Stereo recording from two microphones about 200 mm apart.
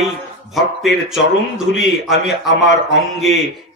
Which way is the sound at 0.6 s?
Centre (ahead or behind).